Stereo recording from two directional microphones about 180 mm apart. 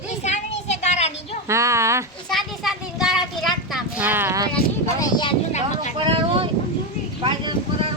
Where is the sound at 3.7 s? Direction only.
5° right (ahead or behind).